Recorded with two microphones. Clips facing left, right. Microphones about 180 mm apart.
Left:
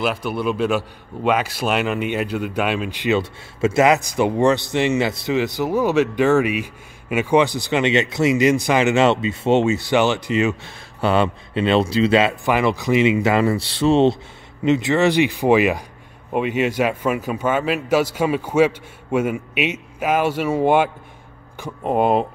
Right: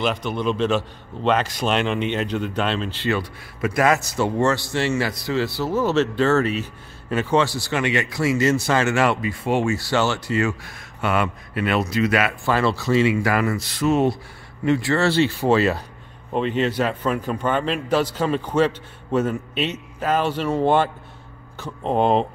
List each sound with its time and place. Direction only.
0.0 s speech: 10° left (ahead or behind)